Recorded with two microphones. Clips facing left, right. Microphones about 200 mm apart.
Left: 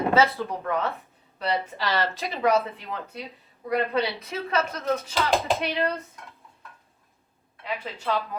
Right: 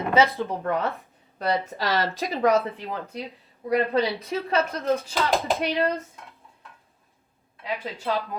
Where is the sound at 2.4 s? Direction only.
35° right (ahead or behind).